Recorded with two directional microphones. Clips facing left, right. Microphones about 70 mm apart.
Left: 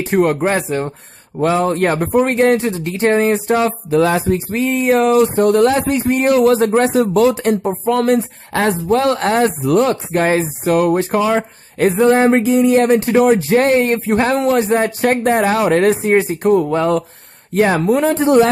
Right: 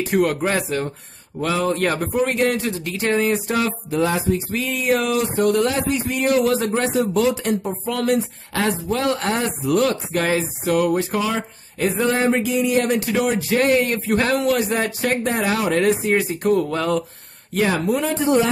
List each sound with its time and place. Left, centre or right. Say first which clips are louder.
0.0 s speech: left 4 dB; left
4.0 s a sound: left 4 dB; left
4.5 s a man's voice: left 6 dB; left
9.8 s a man's voice: left 5 dB; left